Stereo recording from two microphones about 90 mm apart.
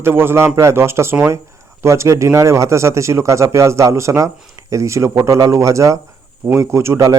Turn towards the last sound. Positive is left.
turn(degrees=-30)  # may be behind; listen again after turning